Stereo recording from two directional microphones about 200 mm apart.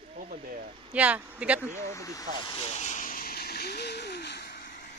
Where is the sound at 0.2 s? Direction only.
45° right (ahead or behind).